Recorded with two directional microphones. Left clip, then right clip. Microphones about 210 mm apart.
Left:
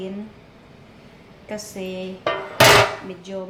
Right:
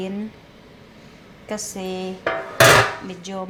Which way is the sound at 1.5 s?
40° right (ahead or behind).